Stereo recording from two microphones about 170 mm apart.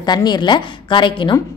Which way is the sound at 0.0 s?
25° left (ahead or behind).